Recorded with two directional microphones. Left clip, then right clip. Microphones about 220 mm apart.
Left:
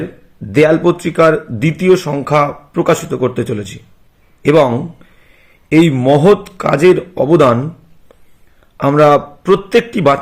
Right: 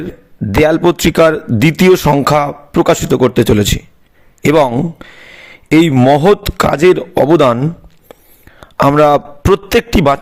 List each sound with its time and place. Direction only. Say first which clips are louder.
0.6 s speech: right 1 dB; 45° right (ahead or behind)
8.6 s a man's voice: right 1 dB; 50° right (ahead or behind)